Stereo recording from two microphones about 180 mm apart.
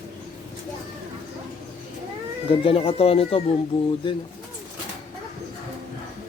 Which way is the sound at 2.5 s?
30° left (ahead or behind).